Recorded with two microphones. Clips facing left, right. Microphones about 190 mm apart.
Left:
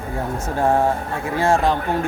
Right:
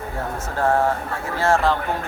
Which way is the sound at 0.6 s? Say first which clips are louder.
Left 1 dB; 15° left (ahead or behind).